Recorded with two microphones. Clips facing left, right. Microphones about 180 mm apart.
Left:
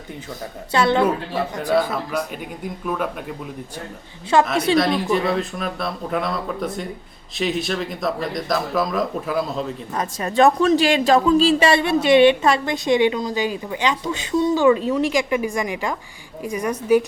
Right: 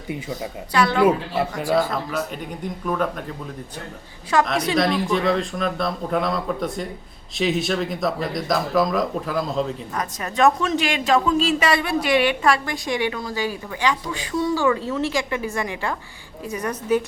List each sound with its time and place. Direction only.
0.7 s speech: 25° left (ahead or behind)
1.0 s speech: 10° right (ahead or behind)
1.7 s a man's voice: 5° left (ahead or behind)
4.3 s speech: 25° left (ahead or behind)
4.8 s a man's voice: centre (ahead or behind)
9.9 s a woman's voice: 30° left (ahead or behind); by 17.0 s 10° left (ahead or behind)